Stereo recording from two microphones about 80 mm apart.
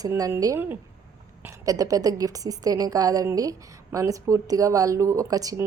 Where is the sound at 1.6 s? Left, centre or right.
Right.